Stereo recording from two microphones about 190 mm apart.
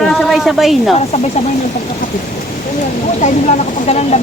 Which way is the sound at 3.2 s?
40° left (ahead or behind).